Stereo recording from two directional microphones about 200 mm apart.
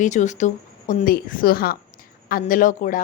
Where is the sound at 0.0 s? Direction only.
35° left (ahead or behind).